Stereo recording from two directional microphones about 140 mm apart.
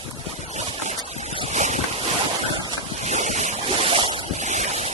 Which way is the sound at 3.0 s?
55° right (ahead or behind).